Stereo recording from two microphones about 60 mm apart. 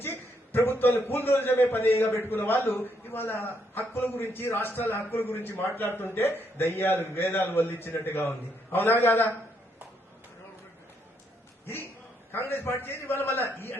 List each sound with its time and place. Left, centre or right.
0.0 s a sound: left
0.9 s a man's voice: left
11.6 s a man's voice: left